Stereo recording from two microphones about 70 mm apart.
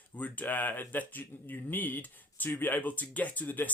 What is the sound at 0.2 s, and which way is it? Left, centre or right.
Speech, left.